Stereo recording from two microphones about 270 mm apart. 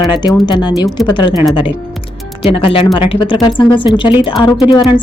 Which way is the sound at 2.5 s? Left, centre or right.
Centre.